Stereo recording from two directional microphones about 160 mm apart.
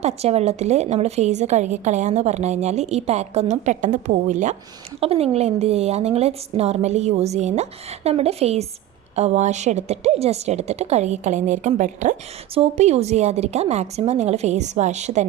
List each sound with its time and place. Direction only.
0.0 s a woman's voice: 40° right (ahead or behind)
4.9 s a woman's voice: 40° right (ahead or behind)